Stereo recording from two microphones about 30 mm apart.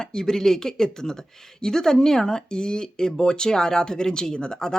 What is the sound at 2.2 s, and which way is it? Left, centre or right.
Speech, left.